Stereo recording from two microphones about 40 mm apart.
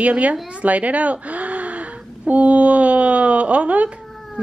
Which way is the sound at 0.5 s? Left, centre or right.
Right.